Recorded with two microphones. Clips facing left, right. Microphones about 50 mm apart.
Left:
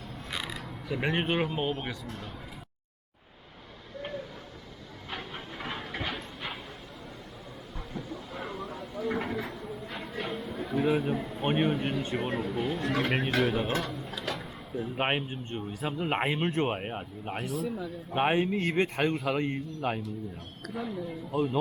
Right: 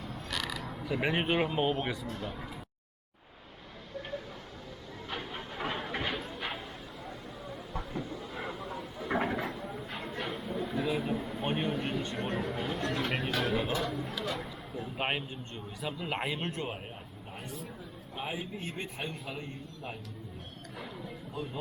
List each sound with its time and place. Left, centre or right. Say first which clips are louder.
0.3 s mechanisms: even; centre
0.9 s speech: left 1 dB; centre
5.1 s train: even; centre
7.9 s a sound: left 3 dB; centre
11.4 s speech: left 6 dB; left
12.1 s speech: left 3 dB; centre
13.5 s speech: left 2 dB; left
14.3 s speech: left 3 dB; left
14.9 s speech: left 4 dB; left
16.6 s speech: left 8 dB; left
17.3 s speech: left 10 dB; left
21.3 s speech: left 12 dB; left